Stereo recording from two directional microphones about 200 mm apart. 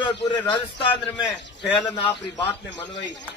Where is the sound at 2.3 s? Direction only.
60° left (ahead or behind).